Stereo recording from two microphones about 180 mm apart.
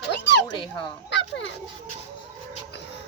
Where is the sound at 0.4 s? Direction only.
25° left (ahead or behind).